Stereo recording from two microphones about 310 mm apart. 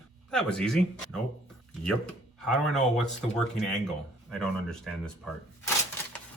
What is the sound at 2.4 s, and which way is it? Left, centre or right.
Speech, centre.